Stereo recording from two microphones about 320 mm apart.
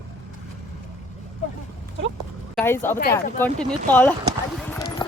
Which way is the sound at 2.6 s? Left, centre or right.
Centre.